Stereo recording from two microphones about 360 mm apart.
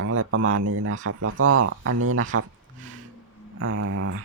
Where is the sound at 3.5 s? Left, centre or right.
Right.